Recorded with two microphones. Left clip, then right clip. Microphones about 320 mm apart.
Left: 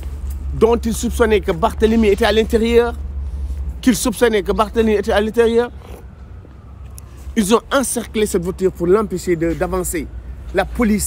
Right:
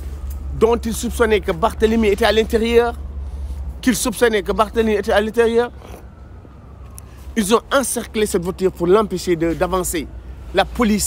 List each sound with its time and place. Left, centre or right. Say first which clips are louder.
0.6 s speech: left 2 dB; centre
7.3 s speech: left 1 dB; centre